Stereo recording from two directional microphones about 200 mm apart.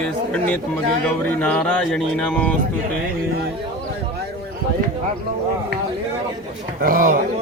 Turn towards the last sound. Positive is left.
turn(degrees=-45)  # may be behind; listen again after turning